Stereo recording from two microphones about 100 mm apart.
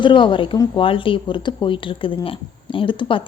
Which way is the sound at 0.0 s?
55° left (ahead or behind).